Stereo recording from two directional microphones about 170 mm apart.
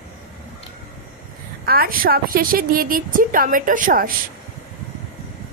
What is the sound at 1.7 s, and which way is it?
A woman's voice, 60° right (ahead or behind).